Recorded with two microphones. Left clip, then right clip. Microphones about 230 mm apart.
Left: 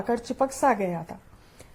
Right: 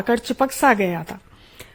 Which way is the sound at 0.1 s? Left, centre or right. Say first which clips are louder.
Right 6 dB; right.